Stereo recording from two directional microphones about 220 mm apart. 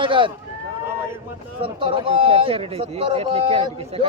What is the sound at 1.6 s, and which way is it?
Speech, 25° right (ahead or behind).